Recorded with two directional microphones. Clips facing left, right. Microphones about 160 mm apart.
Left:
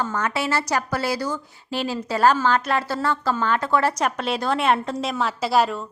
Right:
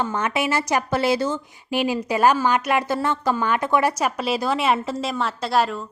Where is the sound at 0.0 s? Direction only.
20° right (ahead or behind).